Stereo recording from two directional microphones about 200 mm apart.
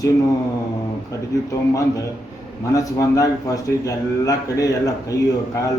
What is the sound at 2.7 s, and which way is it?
A man's voice, 15° left (ahead or behind).